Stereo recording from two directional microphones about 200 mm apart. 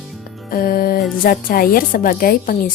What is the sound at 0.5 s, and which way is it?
Music, 45° left (ahead or behind).